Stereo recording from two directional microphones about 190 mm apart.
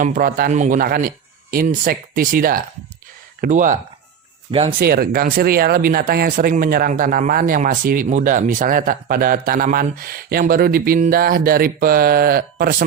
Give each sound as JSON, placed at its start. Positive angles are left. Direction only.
{"t": 0.0, "sound": "speech", "side_deg": -45}
{"t": 4.8, "sound": "speech", "side_deg": -50}